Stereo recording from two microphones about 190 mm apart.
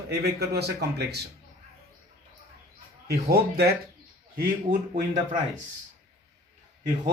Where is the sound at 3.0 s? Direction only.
55° right (ahead or behind).